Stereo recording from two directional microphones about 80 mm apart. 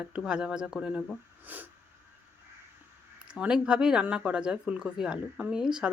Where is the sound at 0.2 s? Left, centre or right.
Centre.